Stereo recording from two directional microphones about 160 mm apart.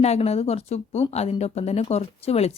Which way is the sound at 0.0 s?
40° left (ahead or behind).